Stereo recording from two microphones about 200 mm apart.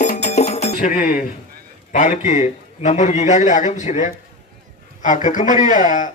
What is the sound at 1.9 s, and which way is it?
Speech, 40° left (ahead or behind).